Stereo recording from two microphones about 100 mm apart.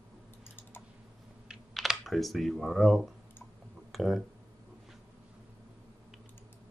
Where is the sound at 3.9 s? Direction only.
Centre (ahead or behind).